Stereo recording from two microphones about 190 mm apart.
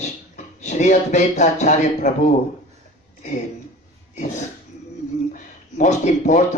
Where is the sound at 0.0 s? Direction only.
40° left (ahead or behind).